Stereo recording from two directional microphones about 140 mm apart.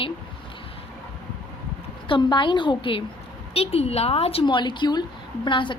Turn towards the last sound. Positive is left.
turn(degrees=35)  # may be behind; listen again after turning